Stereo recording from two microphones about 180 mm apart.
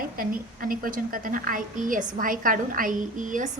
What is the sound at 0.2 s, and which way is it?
A woman's voice, 50° right (ahead or behind).